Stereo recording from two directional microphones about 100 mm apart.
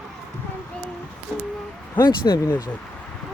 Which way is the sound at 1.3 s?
20° right (ahead or behind).